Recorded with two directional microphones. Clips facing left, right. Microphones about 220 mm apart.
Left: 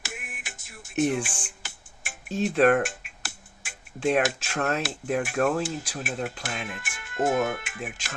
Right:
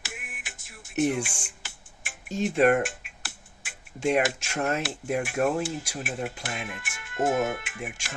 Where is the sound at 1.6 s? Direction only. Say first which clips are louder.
Left 2 dB; 45° left (ahead or behind).